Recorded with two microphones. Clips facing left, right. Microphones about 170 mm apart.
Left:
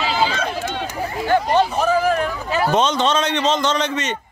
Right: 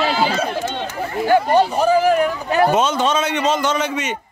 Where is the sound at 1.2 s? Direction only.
10° right (ahead or behind).